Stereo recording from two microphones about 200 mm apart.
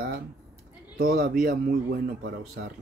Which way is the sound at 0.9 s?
45° right (ahead or behind).